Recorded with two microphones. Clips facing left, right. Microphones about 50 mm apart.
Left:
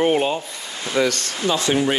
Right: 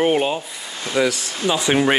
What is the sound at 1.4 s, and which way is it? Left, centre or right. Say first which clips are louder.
Speech: right 1 dB; centre.